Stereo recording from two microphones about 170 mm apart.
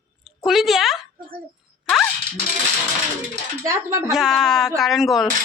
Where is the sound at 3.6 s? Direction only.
15° right (ahead or behind).